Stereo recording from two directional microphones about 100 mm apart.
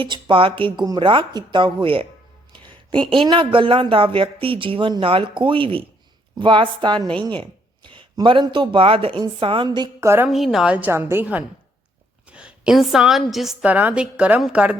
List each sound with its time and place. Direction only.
0.0 s speech: 60° right (ahead or behind)
3.2 s speech: 55° right (ahead or behind)
9.6 s speech: 40° right (ahead or behind)
10.0 s a woman's voice: 25° right (ahead or behind)
10.2 s a woman's voice: centre (ahead or behind)
10.9 s a woman's voice: 25° right (ahead or behind)
12.3 s a woman's voice: 10° right (ahead or behind)
13.7 s a woman's voice: 15° right (ahead or behind)